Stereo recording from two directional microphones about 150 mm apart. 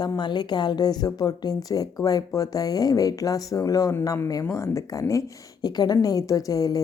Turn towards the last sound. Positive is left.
turn(degrees=25)  # may be behind; listen again after turning